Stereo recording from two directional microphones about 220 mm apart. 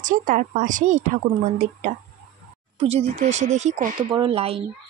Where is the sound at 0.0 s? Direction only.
35° right (ahead or behind).